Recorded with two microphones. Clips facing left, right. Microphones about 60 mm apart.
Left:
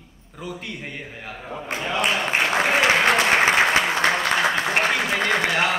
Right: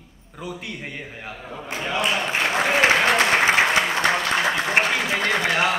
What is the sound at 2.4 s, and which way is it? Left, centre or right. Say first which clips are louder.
Applause: right 1 dB; centre.